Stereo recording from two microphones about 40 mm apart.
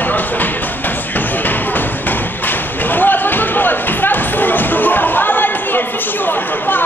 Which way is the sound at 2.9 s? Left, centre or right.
Left.